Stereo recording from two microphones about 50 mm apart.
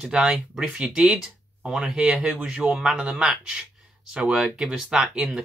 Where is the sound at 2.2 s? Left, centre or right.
Right.